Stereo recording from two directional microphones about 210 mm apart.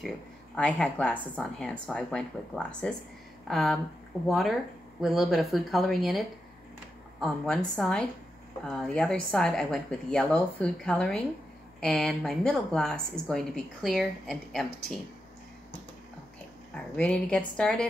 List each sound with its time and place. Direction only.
0.6 s a woman's voice: 5° left (ahead or behind)
16.7 s a woman's voice: 5° left (ahead or behind)